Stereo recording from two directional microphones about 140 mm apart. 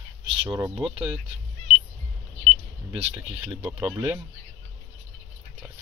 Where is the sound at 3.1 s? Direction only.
10° right (ahead or behind).